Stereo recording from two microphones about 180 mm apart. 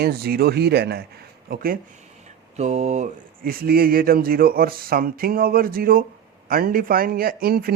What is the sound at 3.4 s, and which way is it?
Speech, 55° right (ahead or behind).